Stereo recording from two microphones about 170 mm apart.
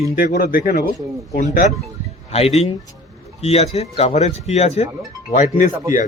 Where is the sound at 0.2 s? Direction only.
55° left (ahead or behind).